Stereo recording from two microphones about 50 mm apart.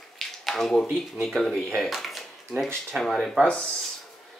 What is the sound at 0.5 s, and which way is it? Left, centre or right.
Speech, centre.